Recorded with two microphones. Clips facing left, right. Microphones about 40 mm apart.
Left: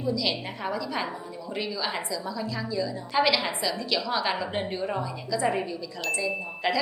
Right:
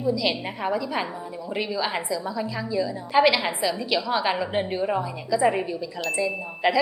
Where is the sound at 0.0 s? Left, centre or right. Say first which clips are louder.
Right 4 dB; centre.